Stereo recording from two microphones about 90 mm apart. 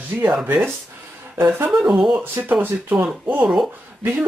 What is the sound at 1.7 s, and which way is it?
Speech, 5° right (ahead or behind).